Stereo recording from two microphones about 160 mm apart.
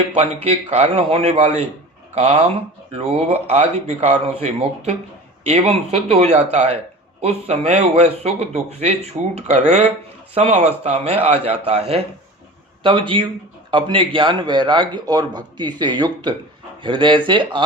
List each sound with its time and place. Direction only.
0.4 s a man's voice: 40° right (ahead or behind)